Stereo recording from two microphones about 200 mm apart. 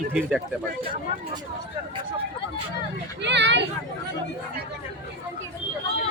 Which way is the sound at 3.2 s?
60° right (ahead or behind).